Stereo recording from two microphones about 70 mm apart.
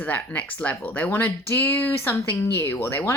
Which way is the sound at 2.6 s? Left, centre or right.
Left.